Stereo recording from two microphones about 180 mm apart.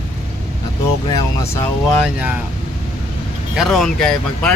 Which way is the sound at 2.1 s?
10° right (ahead or behind).